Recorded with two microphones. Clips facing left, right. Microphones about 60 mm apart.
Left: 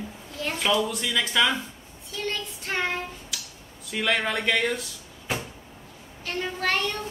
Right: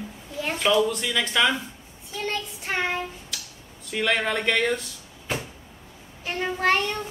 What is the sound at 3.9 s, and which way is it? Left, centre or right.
Speech, centre.